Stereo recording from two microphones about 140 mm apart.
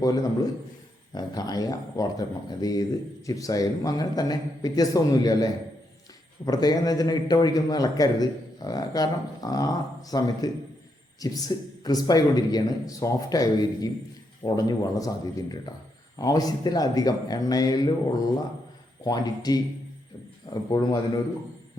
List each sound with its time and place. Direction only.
0.0 s a man's voice: 25° left (ahead or behind)
19.0 s a man's voice: 30° left (ahead or behind)